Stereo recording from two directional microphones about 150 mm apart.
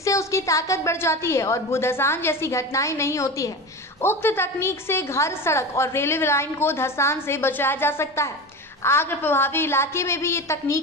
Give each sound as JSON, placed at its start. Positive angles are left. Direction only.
{"t": 0.0, "sound": "a woman's voice", "side_deg": 20}